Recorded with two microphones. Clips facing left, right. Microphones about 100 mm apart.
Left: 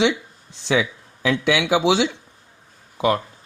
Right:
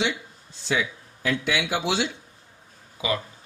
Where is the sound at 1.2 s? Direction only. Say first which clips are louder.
Left 6 dB; 90° left.